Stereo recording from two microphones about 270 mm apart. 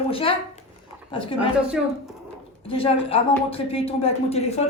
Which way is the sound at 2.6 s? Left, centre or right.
Left.